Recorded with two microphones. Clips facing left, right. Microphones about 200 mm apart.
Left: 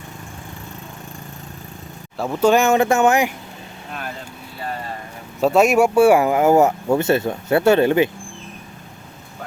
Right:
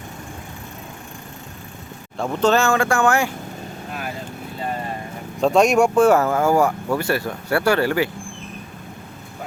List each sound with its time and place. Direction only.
2.1 s speech: 5° left (ahead or behind)
5.4 s speech: 5° left (ahead or behind); by 8.1 s 20° left (ahead or behind)